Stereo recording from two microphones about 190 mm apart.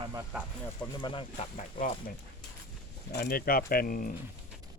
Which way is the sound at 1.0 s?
30° left (ahead or behind).